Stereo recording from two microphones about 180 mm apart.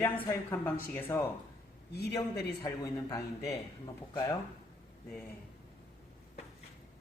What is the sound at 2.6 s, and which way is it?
Speech, 20° left (ahead or behind).